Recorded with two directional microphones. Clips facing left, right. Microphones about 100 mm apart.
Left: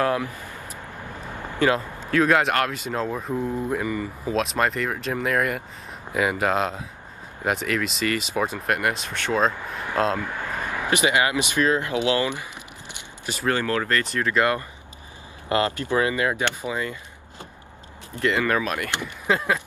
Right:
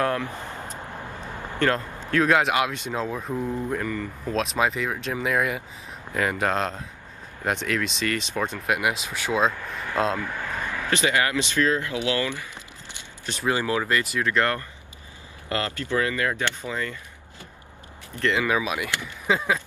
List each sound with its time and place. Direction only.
1.6 s speech: 5° left (ahead or behind)
10.2 s speech: 15° left (ahead or behind)
13.2 s speech: 5° left (ahead or behind)
13.5 s speech: 10° right (ahead or behind)
14.2 s speech: 5° left (ahead or behind)
15.4 s speech: 20° left (ahead or behind)
18.2 s speech: centre (ahead or behind)